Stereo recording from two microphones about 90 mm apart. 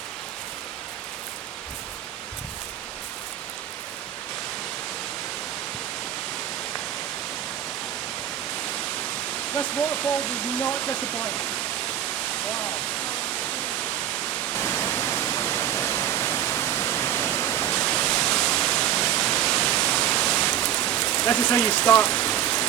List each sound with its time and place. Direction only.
9.6 s speech: 20° left (ahead or behind)
14.5 s pink noise: 30° left (ahead or behind)
18.3 s waterfall: 10° left (ahead or behind)
19.5 s pink noise: 10° left (ahead or behind)
19.9 s pink noise: 25° left (ahead or behind)
20.5 s rain: 30° left (ahead or behind)
21.1 s rain on surface: 20° left (ahead or behind)
21.5 s speech: 25° left (ahead or behind)
22.1 s rain: 20° left (ahead or behind)